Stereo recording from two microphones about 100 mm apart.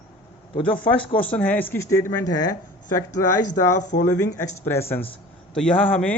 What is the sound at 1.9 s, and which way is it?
Speech, 30° left (ahead or behind).